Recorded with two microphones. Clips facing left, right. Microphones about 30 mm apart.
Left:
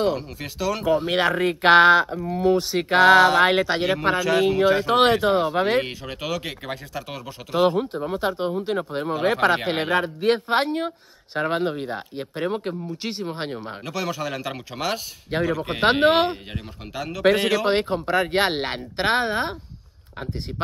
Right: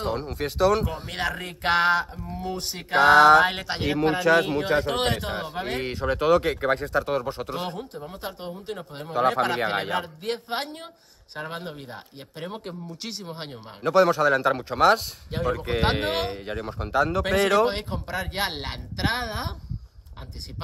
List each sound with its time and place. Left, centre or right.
0.4 s speech: centre
0.8 s speech: left
6.7 s speech: right
7.0 s speech: left
12.5 s speech: left
14.2 s speech: centre
15.3 s speech: left
17.1 s speech: left